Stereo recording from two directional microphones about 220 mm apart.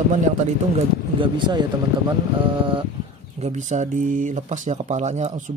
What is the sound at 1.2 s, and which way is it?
Speech, 20° right (ahead or behind).